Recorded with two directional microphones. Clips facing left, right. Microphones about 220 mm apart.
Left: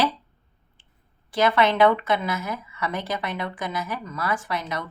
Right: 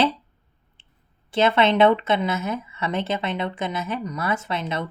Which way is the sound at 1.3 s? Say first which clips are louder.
Right 2 dB; 25° right (ahead or behind).